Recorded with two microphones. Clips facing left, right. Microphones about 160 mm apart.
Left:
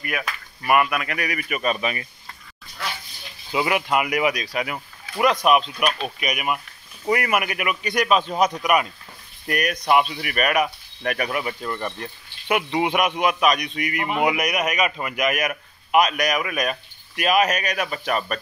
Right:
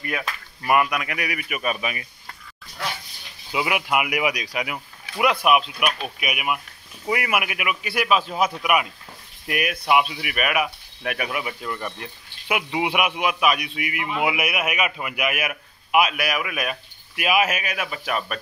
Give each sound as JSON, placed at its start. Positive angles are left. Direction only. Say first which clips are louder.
{"t": 0.0, "sound": "speech", "louder": "even", "side_deg": -25}
{"t": 3.5, "sound": "a man's voice", "louder": "left 2 dB", "side_deg": -10}
{"t": 13.9, "sound": "speech", "louder": "left 3 dB", "side_deg": 55}
{"t": 14.2, "sound": "speech", "louder": "left 2 dB", "side_deg": -5}